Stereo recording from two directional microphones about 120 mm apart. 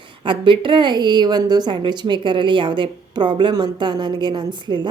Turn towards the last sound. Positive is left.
turn(degrees=-40)  # may be behind; listen again after turning